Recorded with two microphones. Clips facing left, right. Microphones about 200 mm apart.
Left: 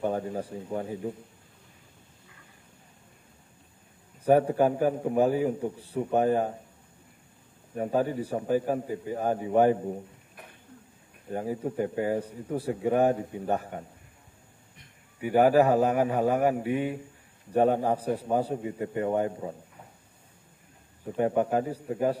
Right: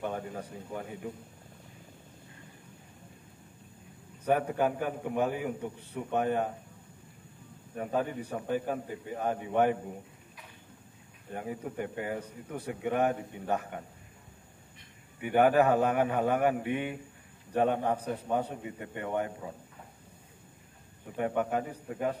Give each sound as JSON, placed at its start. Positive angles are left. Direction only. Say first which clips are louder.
{"t": 0.0, "sound": "a man's voice", "louder": "left 6 dB", "side_deg": 30}
{"t": 4.3, "sound": "a man's voice", "louder": "left 6 dB", "side_deg": 30}
{"t": 7.8, "sound": "a man's voice", "louder": "left 5 dB", "side_deg": 35}
{"t": 11.3, "sound": "a man's voice", "louder": "left 6 dB", "side_deg": 30}
{"t": 15.2, "sound": "a man's voice", "louder": "left 3 dB", "side_deg": 35}
{"t": 21.2, "sound": "a man's voice", "louder": "left 5 dB", "side_deg": 30}